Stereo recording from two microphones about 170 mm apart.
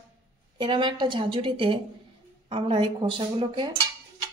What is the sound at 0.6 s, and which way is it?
A woman's voice, 25° right (ahead or behind).